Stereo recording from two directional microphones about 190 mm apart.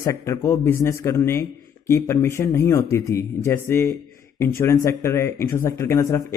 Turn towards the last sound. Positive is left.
turn(degrees=15)  # may be behind; listen again after turning